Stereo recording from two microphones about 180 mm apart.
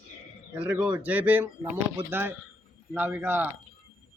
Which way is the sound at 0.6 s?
10° right (ahead or behind).